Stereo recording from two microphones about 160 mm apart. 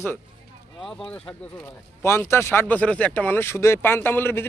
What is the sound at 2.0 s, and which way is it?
A man's voice, 15° left (ahead or behind).